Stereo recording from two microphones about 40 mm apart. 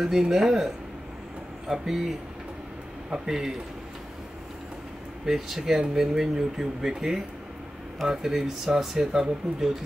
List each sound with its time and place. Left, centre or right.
0.0 s speech: centre
1.7 s speech: centre
5.2 s speech: centre